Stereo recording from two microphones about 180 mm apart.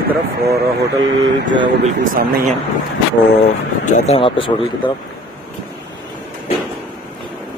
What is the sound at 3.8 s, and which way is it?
Speech, 45° left (ahead or behind).